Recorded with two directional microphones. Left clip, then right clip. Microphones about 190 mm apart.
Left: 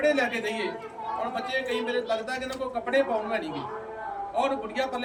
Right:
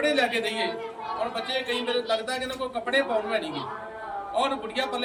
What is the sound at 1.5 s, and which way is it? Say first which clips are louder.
A man's voice: even; 5° left (ahead or behind).